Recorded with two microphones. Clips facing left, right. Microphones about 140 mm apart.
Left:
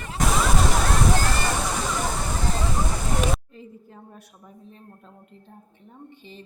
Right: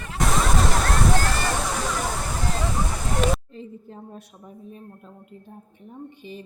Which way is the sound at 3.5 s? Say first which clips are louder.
Right 5 dB; 25° right (ahead or behind).